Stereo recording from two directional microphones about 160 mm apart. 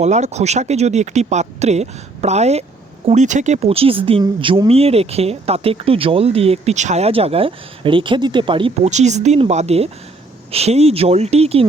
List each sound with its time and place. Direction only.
0.0 s speech: 45° right (ahead or behind)
8.9 s speech: 45° right (ahead or behind)